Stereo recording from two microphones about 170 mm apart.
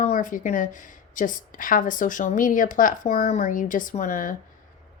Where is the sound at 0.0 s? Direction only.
45° left (ahead or behind).